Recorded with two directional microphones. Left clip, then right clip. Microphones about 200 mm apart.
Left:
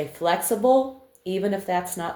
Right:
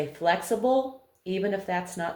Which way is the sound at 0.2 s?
35° left (ahead or behind).